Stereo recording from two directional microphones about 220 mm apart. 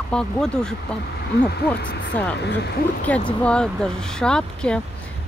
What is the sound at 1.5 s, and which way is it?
Speech, 50° left (ahead or behind).